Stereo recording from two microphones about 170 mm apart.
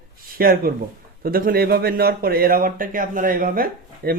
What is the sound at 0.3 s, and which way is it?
A man's voice, 60° right (ahead or behind).